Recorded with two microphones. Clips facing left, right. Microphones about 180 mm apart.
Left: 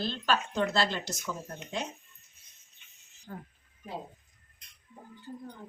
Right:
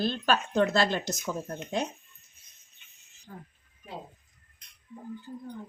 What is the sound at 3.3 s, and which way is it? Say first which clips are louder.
Speech: left 3 dB; 60° left (ahead or behind).